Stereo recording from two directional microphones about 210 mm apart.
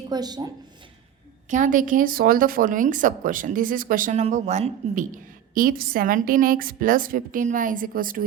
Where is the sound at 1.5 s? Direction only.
35° right (ahead or behind).